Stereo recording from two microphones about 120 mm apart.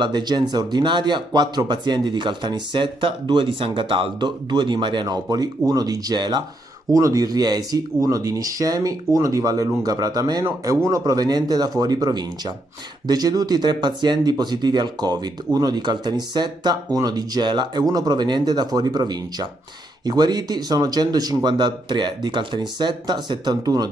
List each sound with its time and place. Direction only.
0.0 s speech: 35° right (ahead or behind)